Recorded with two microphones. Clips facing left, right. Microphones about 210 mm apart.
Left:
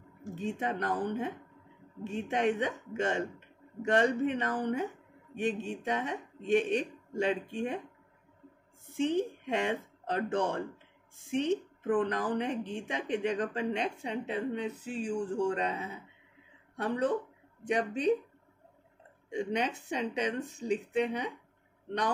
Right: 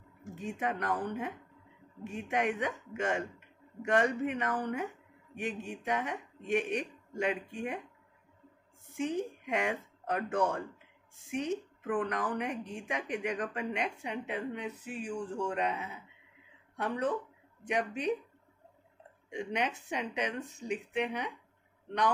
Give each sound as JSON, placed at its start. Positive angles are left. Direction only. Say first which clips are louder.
{"t": 0.2, "sound": "speech", "louder": "left 2 dB", "side_deg": 25}
{"t": 8.9, "sound": "a woman's voice", "louder": "left 4 dB", "side_deg": 30}
{"t": 19.3, "sound": "speech", "louder": "left 3 dB", "side_deg": 30}